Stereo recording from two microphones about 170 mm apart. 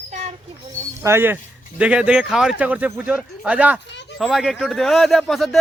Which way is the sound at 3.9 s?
90° left.